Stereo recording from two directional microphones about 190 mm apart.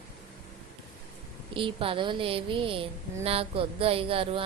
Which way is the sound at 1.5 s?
30° right (ahead or behind).